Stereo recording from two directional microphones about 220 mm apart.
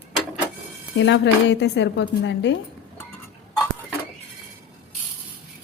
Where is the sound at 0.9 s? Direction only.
55° left (ahead or behind).